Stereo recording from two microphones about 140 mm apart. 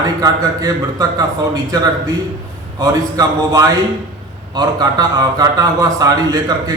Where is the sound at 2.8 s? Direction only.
25° right (ahead or behind).